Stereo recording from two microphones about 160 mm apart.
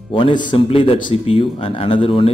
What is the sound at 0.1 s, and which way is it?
A man's voice, 30° left (ahead or behind).